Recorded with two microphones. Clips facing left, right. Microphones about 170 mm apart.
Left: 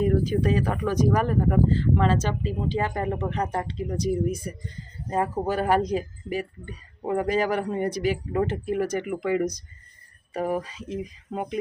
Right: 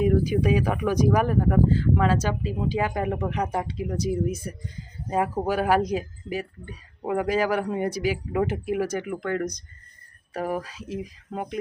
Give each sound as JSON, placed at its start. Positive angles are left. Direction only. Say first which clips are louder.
{"t": 0.0, "sound": "speech", "louder": "right 1 dB", "side_deg": -10}